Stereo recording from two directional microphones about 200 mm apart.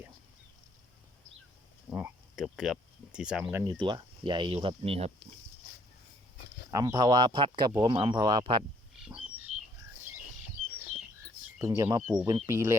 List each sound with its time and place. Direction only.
1.9 s cricket: 10° right (ahead or behind)
3.6 s speech: 20° right (ahead or behind)
6.7 s speech: 15° right (ahead or behind)
9.5 s a sound: 35° right (ahead or behind)
11.6 s speech: 15° right (ahead or behind)